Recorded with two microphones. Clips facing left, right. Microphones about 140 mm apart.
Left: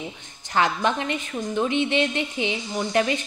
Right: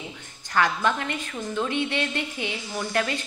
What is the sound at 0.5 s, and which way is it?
A woman's voice, 20° left (ahead or behind).